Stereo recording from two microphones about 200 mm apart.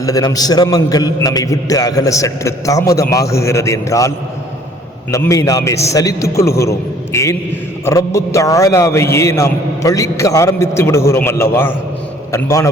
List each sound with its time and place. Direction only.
0.0 s a man's voice: 15° left (ahead or behind)
5.1 s a man's voice: 15° left (ahead or behind)